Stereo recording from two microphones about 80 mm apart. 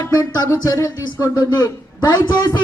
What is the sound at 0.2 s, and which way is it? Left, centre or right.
Speech, left.